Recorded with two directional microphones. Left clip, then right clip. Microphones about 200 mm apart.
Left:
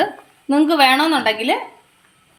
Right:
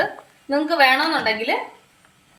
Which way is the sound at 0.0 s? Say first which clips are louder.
Left 3 dB; 45° left (ahead or behind).